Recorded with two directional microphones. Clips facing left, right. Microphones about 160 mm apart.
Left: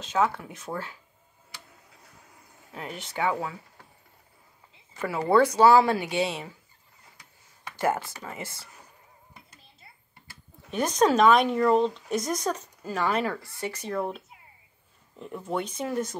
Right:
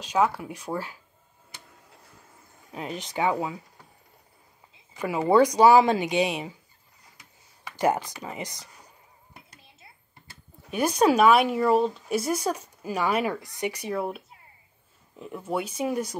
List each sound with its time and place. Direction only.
0.0 s speech: 15° right (ahead or behind)
2.7 s speech: 20° right (ahead or behind)
4.9 s speech: 15° right (ahead or behind)
7.7 s speech: 15° right (ahead or behind)
10.7 s speech: 10° right (ahead or behind)